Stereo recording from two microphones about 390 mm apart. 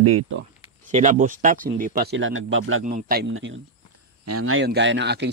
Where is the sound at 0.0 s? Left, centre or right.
Right.